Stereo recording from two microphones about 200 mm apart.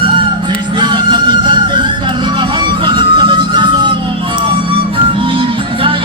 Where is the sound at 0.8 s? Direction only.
20° right (ahead or behind).